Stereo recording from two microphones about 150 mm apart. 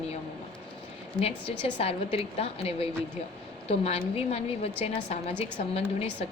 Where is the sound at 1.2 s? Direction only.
40° left (ahead or behind).